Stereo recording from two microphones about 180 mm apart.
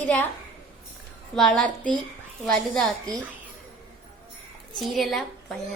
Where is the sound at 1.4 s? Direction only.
Centre (ahead or behind).